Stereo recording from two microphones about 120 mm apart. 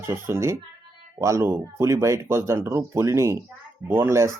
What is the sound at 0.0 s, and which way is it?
Speech, 20° right (ahead or behind).